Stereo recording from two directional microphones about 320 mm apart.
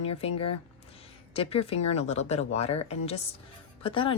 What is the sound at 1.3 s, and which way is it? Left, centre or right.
Speech, centre.